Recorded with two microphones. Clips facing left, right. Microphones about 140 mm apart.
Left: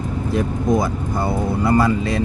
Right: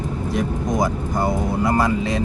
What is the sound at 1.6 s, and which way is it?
Speech, 15° right (ahead or behind).